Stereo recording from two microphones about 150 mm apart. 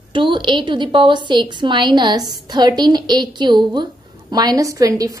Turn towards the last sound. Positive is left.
turn(degrees=-25)  # may be behind; listen again after turning